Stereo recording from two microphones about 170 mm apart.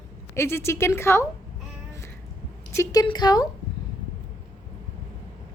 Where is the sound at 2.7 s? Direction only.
20° left (ahead or behind).